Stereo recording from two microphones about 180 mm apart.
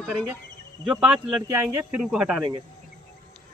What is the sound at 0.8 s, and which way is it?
Speech, 5° right (ahead or behind).